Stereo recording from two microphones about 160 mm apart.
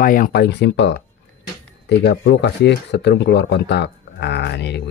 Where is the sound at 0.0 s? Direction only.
60° left (ahead or behind).